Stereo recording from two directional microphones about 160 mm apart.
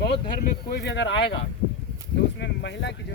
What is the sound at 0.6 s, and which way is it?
Speech, 90° left.